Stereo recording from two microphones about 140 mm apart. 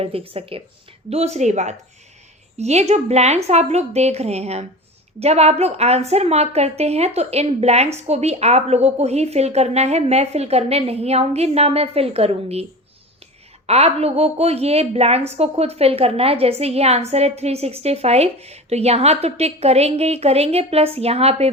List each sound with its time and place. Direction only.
0.0 s a woman's voice: 45° right (ahead or behind)
13.7 s a woman's voice: 50° right (ahead or behind)